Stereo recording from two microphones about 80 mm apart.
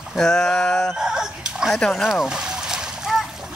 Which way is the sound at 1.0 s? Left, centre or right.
Centre.